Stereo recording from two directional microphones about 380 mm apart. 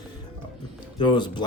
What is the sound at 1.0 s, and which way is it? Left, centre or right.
Speech, centre.